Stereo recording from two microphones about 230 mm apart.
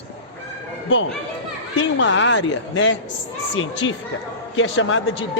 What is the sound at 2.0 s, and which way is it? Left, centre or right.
Speech, left.